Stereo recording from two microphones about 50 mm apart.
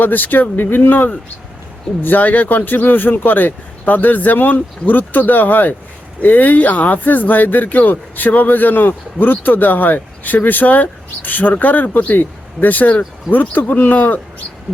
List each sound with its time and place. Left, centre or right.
0.0 s speech: left